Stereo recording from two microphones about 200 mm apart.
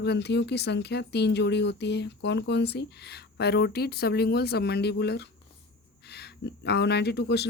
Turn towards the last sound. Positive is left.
turn(degrees=55)  # may be behind; listen again after turning